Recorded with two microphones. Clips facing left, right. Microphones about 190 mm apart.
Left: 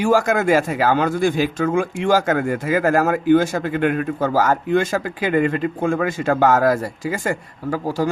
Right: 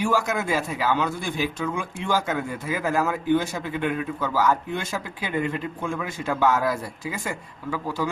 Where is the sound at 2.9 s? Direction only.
50° left (ahead or behind).